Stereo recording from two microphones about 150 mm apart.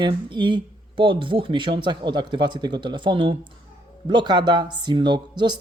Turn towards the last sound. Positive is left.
turn(degrees=-30)  # may be behind; listen again after turning